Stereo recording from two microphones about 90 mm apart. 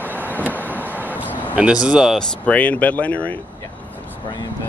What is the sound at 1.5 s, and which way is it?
Speech, 10° right (ahead or behind).